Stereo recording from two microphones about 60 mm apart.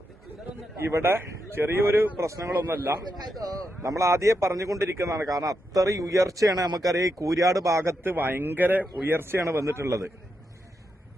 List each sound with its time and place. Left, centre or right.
0.9 s speech: right
2.2 s a man's voice: right
2.6 s speech: right
3.8 s a man's voice: right
5.1 s speech: right
8.0 s speech: right
9.4 s a man's voice: right